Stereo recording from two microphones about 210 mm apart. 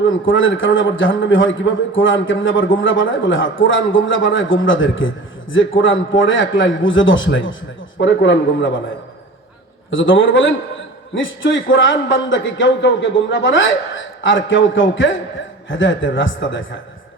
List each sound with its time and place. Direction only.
0.0 s a man's voice: 65° left (ahead or behind)
9.9 s a man's voice: 65° left (ahead or behind)